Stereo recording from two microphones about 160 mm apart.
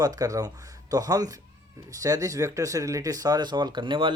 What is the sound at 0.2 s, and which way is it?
Speech, 20° right (ahead or behind).